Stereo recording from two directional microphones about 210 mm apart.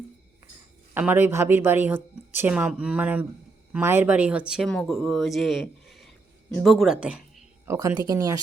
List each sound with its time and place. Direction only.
0.9 s a woman's voice: 10° right (ahead or behind)
7.8 s a woman's voice: 15° right (ahead or behind)